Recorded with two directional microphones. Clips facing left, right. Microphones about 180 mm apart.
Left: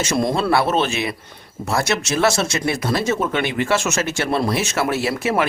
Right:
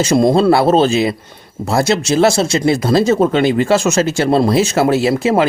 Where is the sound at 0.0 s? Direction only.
30° right (ahead or behind).